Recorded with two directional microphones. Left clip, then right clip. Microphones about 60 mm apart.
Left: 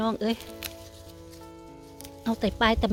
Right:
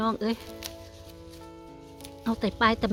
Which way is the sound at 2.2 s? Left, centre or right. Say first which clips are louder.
Even; centre.